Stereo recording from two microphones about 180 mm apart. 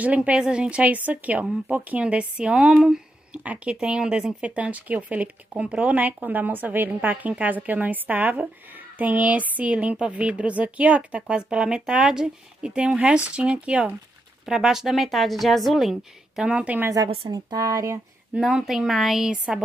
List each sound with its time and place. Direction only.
0.0 s speech: 5° right (ahead or behind)
17.1 s speech: 30° right (ahead or behind)
18.3 s speech: 5° right (ahead or behind)